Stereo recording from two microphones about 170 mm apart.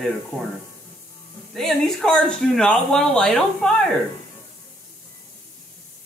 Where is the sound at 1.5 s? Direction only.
Centre (ahead or behind).